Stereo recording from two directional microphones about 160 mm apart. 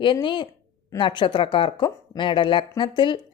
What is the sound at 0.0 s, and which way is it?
A woman's voice, 30° left (ahead or behind).